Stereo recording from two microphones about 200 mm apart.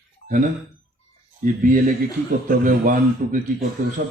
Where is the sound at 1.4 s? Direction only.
40° right (ahead or behind).